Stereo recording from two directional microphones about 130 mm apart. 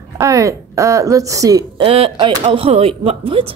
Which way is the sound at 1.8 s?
45° right (ahead or behind).